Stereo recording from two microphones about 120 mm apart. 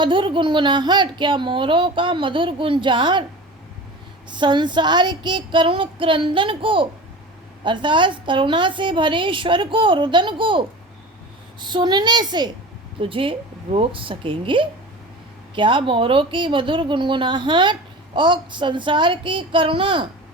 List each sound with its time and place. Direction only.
0.0 s speech: 45° right (ahead or behind)
4.3 s a child's voice: 40° right (ahead or behind)
13.0 s speech: 45° right (ahead or behind)